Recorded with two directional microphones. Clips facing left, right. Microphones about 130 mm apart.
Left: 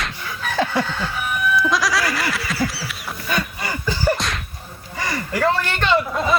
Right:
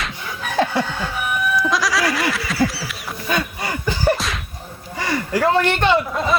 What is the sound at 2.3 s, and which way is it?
Duck, centre (ahead or behind).